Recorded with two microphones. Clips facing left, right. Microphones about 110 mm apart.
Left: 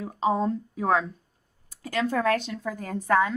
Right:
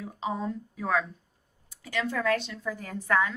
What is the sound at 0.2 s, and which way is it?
A woman's voice, 40° left (ahead or behind).